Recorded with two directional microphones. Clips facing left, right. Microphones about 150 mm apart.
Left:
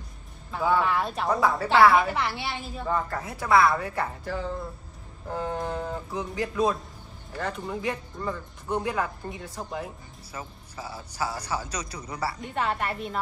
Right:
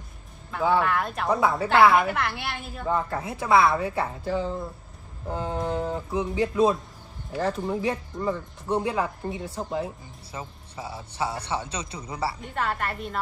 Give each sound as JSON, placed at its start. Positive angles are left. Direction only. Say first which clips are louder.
{"t": 0.7, "sound": "a woman's voice", "louder": "right 1 dB", "side_deg": 0}
{"t": 2.9, "sound": "speech", "louder": "right 2 dB", "side_deg": -20}
{"t": 12.5, "sound": "a woman's voice", "louder": "left 2 dB", "side_deg": 5}